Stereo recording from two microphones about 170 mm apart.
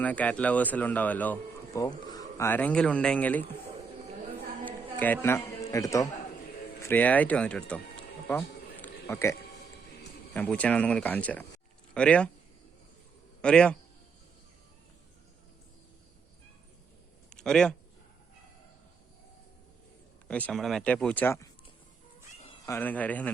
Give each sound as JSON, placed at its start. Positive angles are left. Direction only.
{"t": 0.0, "sound": "speech", "side_deg": 10}
{"t": 2.0, "sound": "a sound", "side_deg": 20}
{"t": 2.5, "sound": "speech", "side_deg": 10}
{"t": 4.6, "sound": "a man's voice", "side_deg": 10}
{"t": 7.7, "sound": "music", "side_deg": 10}
{"t": 10.3, "sound": "speech", "side_deg": 10}
{"t": 13.4, "sound": "a man's voice", "side_deg": 5}
{"t": 17.2, "sound": "a sound", "side_deg": 5}
{"t": 20.2, "sound": "speech", "side_deg": 5}
{"t": 22.6, "sound": "speech", "side_deg": 15}